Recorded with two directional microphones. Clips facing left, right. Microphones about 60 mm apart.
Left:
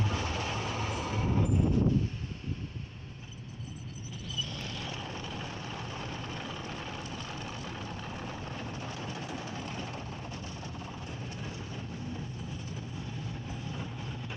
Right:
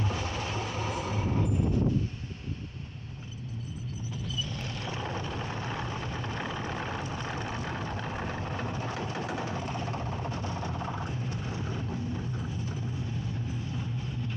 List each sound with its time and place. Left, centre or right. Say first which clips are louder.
4.6 s vehicle: right 2 dB; centre
5.0 s vehicle: right 5 dB; right
5.6 s vehicle: right 5 dB; right
7.0 s vehicle: right 5 dB; right
9.9 s a sound: right 6 dB; right